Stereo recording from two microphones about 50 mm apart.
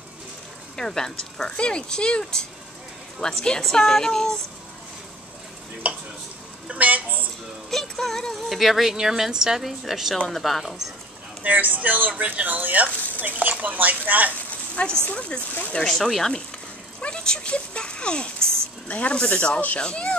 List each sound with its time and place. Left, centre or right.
0.7 s speech: centre
5.8 s stir: right
6.7 s a sound: right
7.7 s speech: centre
11.4 s speech: right
15.0 s speech: left
15.9 s speech: centre